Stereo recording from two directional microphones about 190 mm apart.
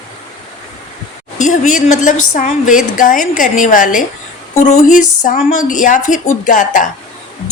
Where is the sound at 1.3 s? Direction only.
40° left (ahead or behind).